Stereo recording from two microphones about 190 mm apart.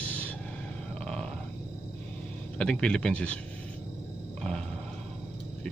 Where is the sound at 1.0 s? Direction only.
5° left (ahead or behind).